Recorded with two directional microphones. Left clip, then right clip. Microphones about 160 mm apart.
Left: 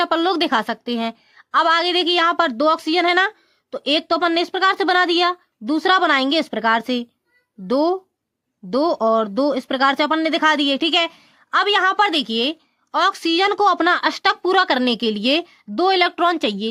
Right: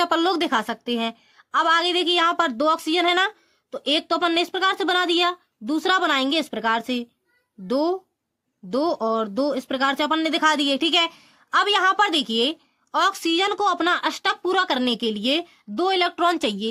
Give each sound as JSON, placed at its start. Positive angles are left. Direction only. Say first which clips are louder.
{"t": 0.0, "sound": "speech", "louder": "left 2 dB", "side_deg": 15}